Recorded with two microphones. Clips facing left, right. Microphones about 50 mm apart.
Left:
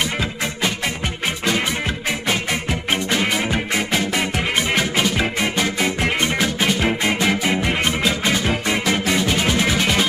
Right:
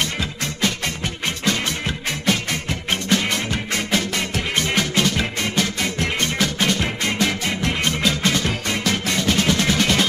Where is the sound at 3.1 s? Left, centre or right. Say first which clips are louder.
Even; centre.